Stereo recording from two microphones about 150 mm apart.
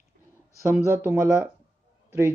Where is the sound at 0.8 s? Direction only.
15° right (ahead or behind).